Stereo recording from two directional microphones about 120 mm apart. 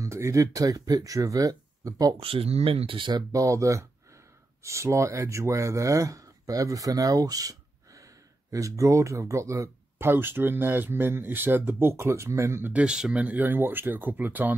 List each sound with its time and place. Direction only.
0.0 s speech: 25° right (ahead or behind)
2.1 s speech: 50° right (ahead or behind)
3.1 s speech: 30° right (ahead or behind); by 14.6 s 15° right (ahead or behind)